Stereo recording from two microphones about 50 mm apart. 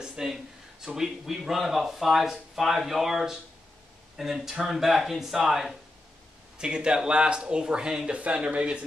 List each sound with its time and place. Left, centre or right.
0.0 s a man's voice: centre
6.6 s speech: centre
8.1 s speech: right